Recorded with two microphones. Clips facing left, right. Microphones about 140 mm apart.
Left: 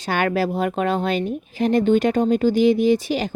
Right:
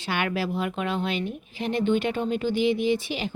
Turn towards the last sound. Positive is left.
turn(degrees=40)  # may be behind; listen again after turning